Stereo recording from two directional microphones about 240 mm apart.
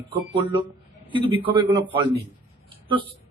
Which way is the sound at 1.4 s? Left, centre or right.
Centre.